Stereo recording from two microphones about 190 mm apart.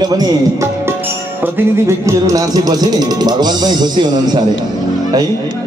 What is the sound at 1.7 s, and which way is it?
Speech, 15° right (ahead or behind).